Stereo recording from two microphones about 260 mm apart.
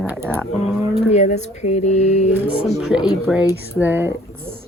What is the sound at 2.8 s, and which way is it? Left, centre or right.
Speech, centre.